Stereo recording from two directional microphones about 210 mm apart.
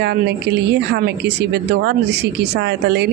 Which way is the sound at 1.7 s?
55° right (ahead or behind).